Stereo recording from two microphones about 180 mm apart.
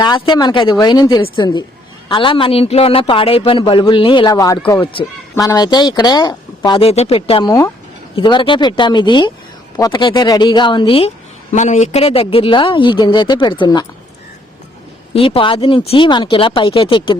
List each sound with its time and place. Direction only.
0.0 s a man's voice: 25° left (ahead or behind)
5.3 s a man's voice: 15° left (ahead or behind)
11.5 s a man's voice: 40° left (ahead or behind); by 13.8 s 25° left (ahead or behind)
15.1 s a man's voice: 30° left (ahead or behind)